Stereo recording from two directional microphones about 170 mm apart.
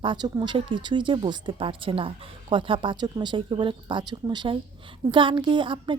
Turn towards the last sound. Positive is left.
turn(degrees=-30)  # may be behind; listen again after turning